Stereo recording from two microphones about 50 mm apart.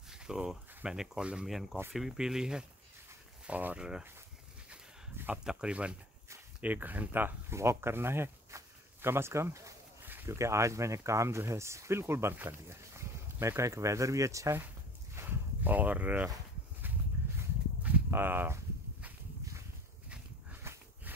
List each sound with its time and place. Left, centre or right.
0.1 s speech: centre
1.4 s speech: centre
3.4 s speech: right
3.7 s speech: centre
5.4 s speech: centre
6.6 s speech: right
7.5 s speech: right
12.4 s speech: right
12.9 s speech: right
15.2 s speech: right
18.1 s speech: right
20.7 s dog: right